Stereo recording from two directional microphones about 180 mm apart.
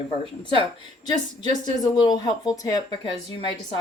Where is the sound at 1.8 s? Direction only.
25° left (ahead or behind).